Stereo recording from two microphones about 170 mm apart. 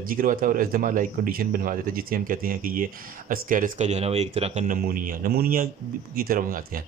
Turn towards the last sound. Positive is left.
turn(degrees=-55)  # may be behind; listen again after turning